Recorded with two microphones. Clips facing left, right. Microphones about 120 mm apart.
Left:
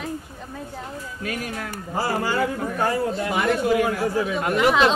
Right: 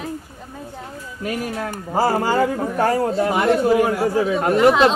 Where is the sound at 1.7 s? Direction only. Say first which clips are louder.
Right 6 dB; 40° right (ahead or behind).